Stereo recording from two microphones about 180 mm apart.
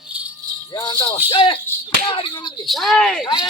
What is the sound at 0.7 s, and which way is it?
Jingle bell, 25° left (ahead or behind).